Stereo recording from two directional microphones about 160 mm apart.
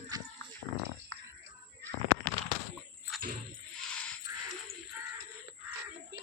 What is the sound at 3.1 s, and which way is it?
Music, centre (ahead or behind).